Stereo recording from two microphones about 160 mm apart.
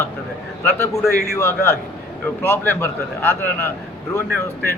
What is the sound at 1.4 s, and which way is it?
A man's voice, 15° left (ahead or behind).